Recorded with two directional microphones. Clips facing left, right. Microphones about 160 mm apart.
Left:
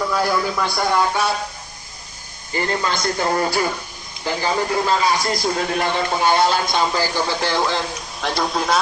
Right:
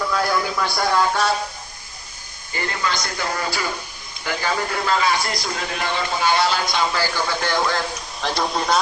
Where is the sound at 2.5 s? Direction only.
35° left (ahead or behind).